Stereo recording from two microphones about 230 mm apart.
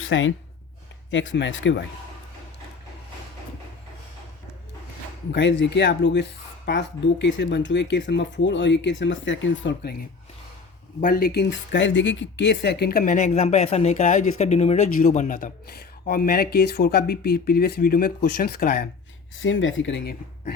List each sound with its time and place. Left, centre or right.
0.0 s speech: left
5.3 s speech: left
11.0 s speech: left
19.4 s speech: left